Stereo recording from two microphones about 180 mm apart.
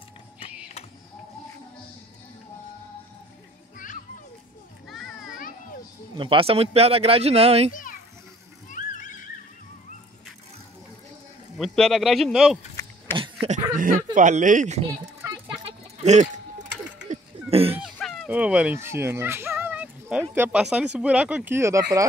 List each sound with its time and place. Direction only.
3.7 s children playing: 45° left (ahead or behind)
6.1 s speech: 30° right (ahead or behind)
7.7 s children playing: 50° left (ahead or behind)
8.6 s neigh: 45° left (ahead or behind)
11.5 s speech: centre (ahead or behind)
13.1 s a sound: 30° right (ahead or behind)
13.7 s speech: 50° right (ahead or behind)
15.2 s a sound: 30° right (ahead or behind)
16.0 s speech: 40° right (ahead or behind)
17.1 s a sound: 35° right (ahead or behind)
17.9 s fowl: centre (ahead or behind)
18.3 s speech: 5° right (ahead or behind)